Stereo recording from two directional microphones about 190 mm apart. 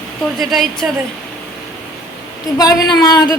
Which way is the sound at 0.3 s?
Centre (ahead or behind).